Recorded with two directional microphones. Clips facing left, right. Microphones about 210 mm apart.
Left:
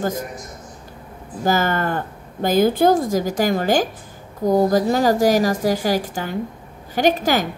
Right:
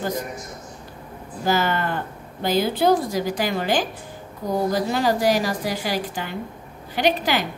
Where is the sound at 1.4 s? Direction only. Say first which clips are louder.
Left 2 dB; 45° left (ahead or behind).